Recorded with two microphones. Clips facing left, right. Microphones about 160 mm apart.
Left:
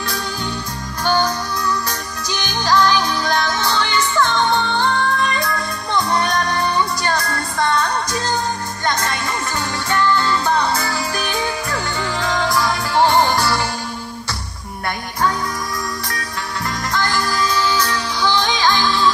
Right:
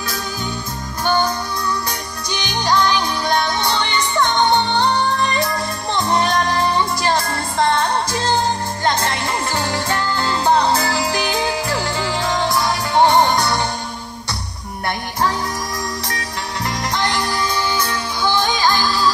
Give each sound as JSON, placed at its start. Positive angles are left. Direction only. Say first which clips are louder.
{"t": 1.0, "sound": "music", "louder": "even", "side_deg": -15}
{"t": 4.4, "sound": "music", "louder": "right 2 dB", "side_deg": -20}
{"t": 12.1, "sound": "music", "louder": "left 1 dB", "side_deg": -25}
{"t": 17.2, "sound": "music", "louder": "left 2 dB", "side_deg": -60}
{"t": 18.4, "sound": "music", "louder": "even", "side_deg": -10}